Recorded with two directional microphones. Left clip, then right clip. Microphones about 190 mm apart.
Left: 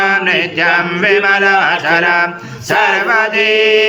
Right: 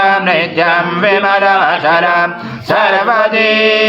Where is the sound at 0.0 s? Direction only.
40° right (ahead or behind).